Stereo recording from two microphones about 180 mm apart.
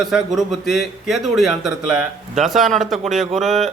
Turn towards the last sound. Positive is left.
turn(degrees=0)  # may be behind; listen again after turning